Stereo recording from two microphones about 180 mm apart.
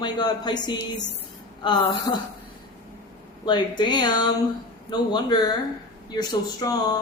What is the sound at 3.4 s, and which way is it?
A woman's voice, 25° left (ahead or behind).